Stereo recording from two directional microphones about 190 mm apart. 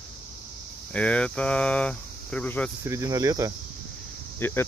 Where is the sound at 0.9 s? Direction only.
5° left (ahead or behind).